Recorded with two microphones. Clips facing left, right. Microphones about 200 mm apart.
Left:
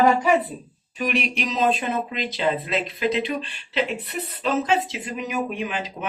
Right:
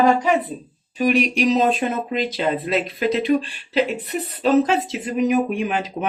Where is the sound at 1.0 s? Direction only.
40° right (ahead or behind).